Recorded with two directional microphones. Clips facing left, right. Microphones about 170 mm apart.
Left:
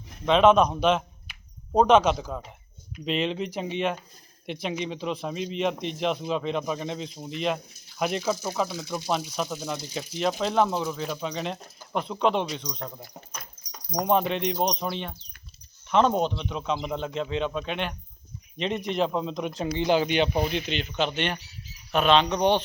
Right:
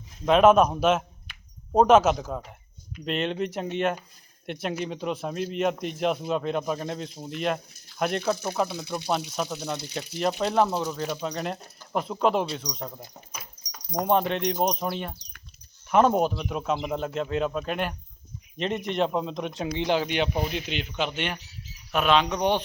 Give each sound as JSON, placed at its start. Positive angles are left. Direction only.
{"t": 0.3, "sound": "speech", "side_deg": -5}
{"t": 13.3, "sound": "dog", "side_deg": -10}
{"t": 13.9, "sound": "speech", "side_deg": 0}